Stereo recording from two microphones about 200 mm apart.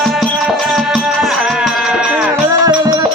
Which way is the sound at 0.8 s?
Centre (ahead or behind).